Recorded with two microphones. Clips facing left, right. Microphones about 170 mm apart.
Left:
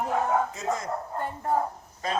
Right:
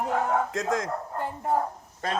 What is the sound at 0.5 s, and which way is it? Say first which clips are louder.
Speech: right 3 dB; 90° right.